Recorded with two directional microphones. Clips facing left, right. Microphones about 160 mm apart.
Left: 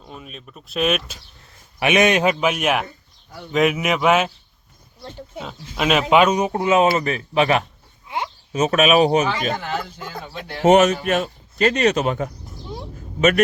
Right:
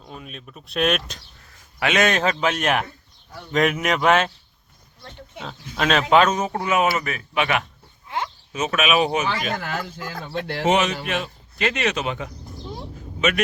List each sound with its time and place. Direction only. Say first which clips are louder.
0.0 s speech: even; centre (ahead or behind)
1.8 s speech: left 4 dB; 15° left (ahead or behind)
5.4 s speech: left 1 dB; 5° left (ahead or behind)
6.5 s speech: left 4 dB; 25° left (ahead or behind)
8.0 s a sound: left 1 dB; 15° left (ahead or behind)
8.5 s speech: left 5 dB; 40° left (ahead or behind)
10.7 s a man's voice: left 7 dB; 45° left (ahead or behind)